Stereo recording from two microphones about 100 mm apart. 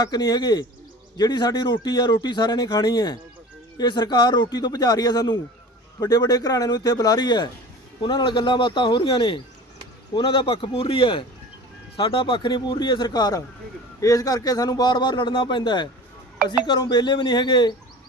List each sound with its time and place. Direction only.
0.0 s a man's voice: 40° left (ahead or behind)